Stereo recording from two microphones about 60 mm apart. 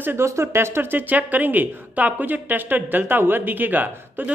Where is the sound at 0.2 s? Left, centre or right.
Right.